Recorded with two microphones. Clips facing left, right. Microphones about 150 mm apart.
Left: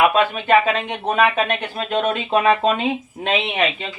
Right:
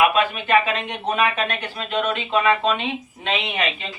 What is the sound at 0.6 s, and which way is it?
Speech, 45° left (ahead or behind).